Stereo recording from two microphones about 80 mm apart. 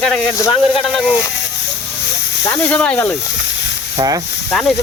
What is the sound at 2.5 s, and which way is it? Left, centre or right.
Speech, centre.